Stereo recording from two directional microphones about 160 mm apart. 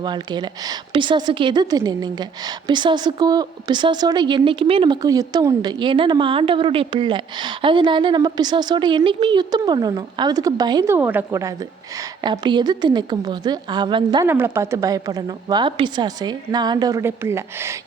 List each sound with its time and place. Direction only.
0.0 s a woman's voice: 25° right (ahead or behind)
5.0 s a woman's voice: 20° right (ahead or behind)
10.9 s a woman's voice: 10° right (ahead or behind); by 14.3 s 30° right (ahead or behind)
14.3 s a woman's voice: 15° right (ahead or behind)